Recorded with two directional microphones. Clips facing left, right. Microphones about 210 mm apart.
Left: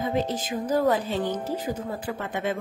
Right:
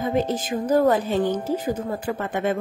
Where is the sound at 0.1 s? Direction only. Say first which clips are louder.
Right 4 dB; 50° right (ahead or behind).